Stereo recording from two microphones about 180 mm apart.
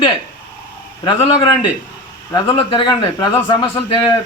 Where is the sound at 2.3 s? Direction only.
20° left (ahead or behind).